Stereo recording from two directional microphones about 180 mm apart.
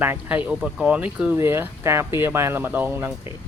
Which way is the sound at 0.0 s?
10° right (ahead or behind).